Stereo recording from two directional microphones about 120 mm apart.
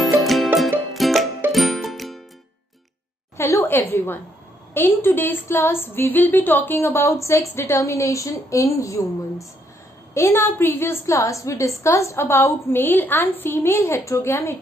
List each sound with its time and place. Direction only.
0.0 s music: centre (ahead or behind)
3.3 s a sound: 25° left (ahead or behind)
4.7 s speech: 15° left (ahead or behind)